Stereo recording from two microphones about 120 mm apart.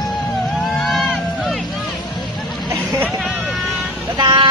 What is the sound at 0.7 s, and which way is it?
Run, centre (ahead or behind).